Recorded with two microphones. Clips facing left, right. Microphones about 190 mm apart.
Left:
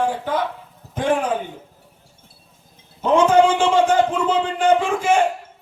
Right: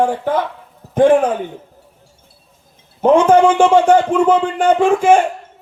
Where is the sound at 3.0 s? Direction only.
55° right (ahead or behind).